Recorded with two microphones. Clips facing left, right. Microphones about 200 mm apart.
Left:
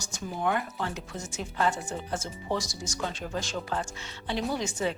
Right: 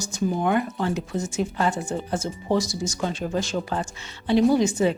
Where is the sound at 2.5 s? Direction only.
5° right (ahead or behind).